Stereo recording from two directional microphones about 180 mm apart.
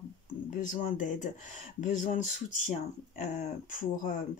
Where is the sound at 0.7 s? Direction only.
45° left (ahead or behind).